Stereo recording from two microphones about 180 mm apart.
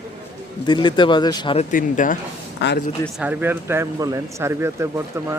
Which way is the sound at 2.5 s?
70° left (ahead or behind).